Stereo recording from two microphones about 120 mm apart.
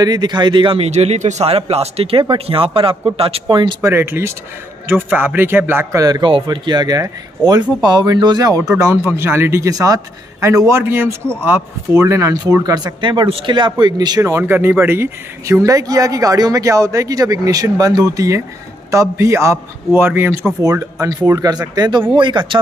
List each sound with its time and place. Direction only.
0.0 s a man's voice: 35° right (ahead or behind)
3.8 s speech: 20° right (ahead or behind)
9.0 s speech: 20° right (ahead or behind)
20.6 s a man's voice: 30° right (ahead or behind)